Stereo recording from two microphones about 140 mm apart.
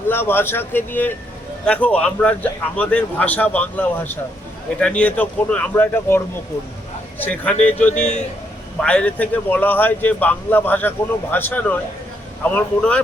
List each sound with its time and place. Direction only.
0.1 s a man's voice: 15° left (ahead or behind)
7.9 s a man's voice: 55° left (ahead or behind)
8.8 s a man's voice: 10° left (ahead or behind)